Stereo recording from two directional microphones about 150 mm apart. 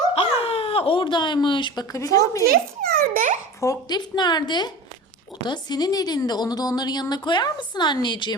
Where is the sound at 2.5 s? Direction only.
80° right.